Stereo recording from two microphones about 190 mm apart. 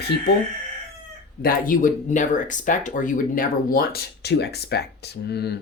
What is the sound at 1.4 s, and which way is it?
Speech, 45° left (ahead or behind).